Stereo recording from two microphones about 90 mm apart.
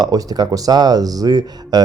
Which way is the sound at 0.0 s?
45° right (ahead or behind).